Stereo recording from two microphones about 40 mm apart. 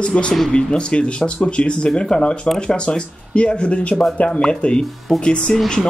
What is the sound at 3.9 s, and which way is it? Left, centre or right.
Speech, centre.